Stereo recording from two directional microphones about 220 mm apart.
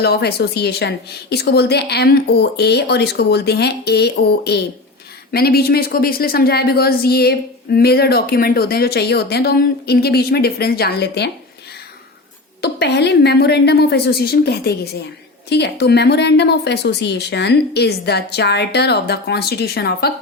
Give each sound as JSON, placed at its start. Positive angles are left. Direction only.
{"t": 0.0, "sound": "a woman's voice", "side_deg": 45}
{"t": 12.6, "sound": "a woman's voice", "side_deg": 50}